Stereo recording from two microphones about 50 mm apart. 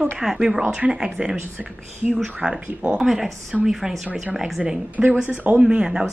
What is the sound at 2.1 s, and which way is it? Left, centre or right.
Speech, centre.